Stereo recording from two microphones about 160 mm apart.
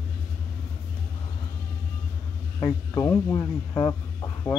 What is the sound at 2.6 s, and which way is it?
Speech, 20° left (ahead or behind).